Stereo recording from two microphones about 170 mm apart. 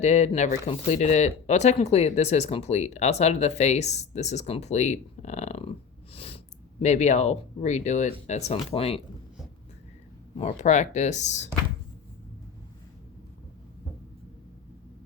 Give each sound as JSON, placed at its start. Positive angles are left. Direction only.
{"t": 0.0, "sound": "speech", "side_deg": 40}
{"t": 10.3, "sound": "speech", "side_deg": 40}